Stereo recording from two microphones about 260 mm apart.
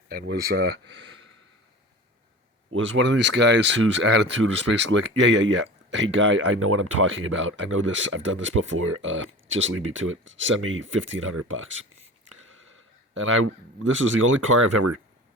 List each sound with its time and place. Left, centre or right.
0.1 s speech: right
2.6 s speech: right